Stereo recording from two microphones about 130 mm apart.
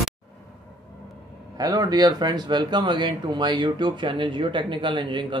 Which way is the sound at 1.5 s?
30° right (ahead or behind).